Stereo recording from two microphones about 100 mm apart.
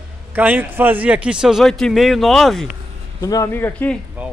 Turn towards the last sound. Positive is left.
turn(degrees=-20)  # may be behind; listen again after turning